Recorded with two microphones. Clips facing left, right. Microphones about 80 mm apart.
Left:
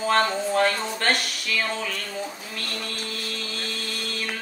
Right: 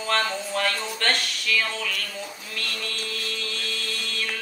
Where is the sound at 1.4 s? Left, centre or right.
Left.